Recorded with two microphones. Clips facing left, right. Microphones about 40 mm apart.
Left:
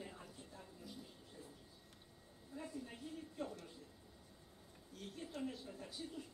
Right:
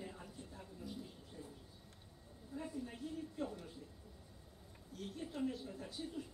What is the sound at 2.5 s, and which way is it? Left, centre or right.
A woman's voice, centre.